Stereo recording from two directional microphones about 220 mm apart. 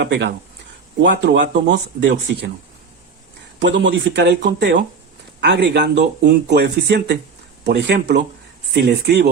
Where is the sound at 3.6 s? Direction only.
55° right (ahead or behind).